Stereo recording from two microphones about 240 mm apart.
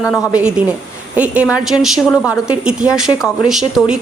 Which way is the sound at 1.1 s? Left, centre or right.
Centre.